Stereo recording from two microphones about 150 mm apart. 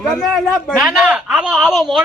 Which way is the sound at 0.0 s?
5° left (ahead or behind).